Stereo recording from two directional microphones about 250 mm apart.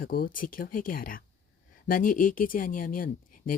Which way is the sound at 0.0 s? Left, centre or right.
Left.